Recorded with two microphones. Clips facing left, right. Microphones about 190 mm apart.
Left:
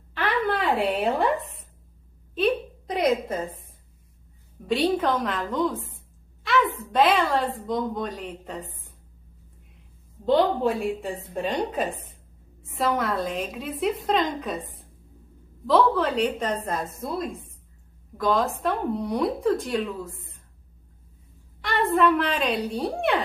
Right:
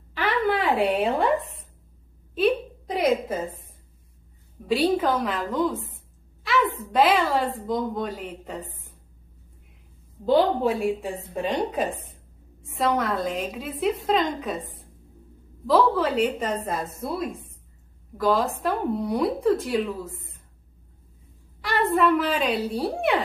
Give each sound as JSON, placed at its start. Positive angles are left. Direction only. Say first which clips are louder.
{"t": 0.1, "sound": "a sound", "louder": "right 2 dB", "side_deg": 0}
{"t": 0.7, "sound": "a woman's voice", "louder": "right 1 dB", "side_deg": 0}
{"t": 2.3, "sound": "a sound", "louder": "right 1 dB", "side_deg": 0}
{"t": 4.6, "sound": "a woman's voice", "louder": "right 1 dB", "side_deg": 0}
{"t": 10.2, "sound": "a woman's voice", "louder": "right 1 dB", "side_deg": 0}
{"t": 21.5, "sound": "a woman's voice", "louder": "even", "side_deg": -5}